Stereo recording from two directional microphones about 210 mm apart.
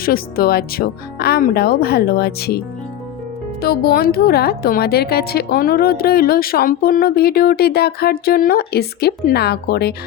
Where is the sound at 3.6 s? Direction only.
45° left (ahead or behind).